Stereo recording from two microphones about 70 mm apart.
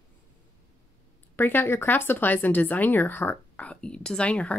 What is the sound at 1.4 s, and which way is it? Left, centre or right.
Speech, left.